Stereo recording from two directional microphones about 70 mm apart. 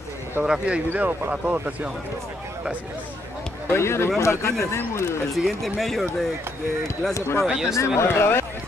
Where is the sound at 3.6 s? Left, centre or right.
Left.